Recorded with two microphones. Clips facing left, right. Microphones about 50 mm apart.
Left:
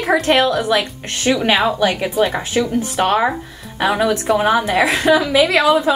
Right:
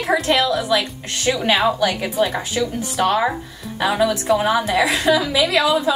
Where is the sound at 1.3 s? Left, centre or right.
Centre; by 6.0 s left.